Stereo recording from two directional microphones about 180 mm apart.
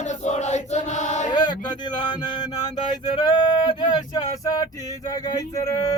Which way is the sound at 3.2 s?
25° left (ahead or behind).